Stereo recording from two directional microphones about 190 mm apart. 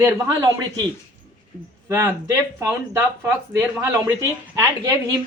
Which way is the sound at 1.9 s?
15° right (ahead or behind).